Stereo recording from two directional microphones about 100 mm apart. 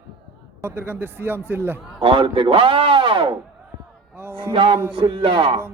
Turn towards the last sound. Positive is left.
turn(degrees=-60)  # may be behind; listen again after turning